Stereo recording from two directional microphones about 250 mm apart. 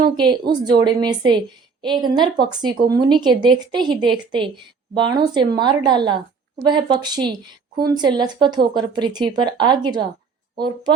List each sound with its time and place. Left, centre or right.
0.2 s a woman's voice: centre